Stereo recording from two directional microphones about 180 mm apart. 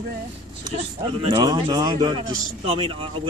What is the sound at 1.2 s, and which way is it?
A man's voice, 25° right (ahead or behind).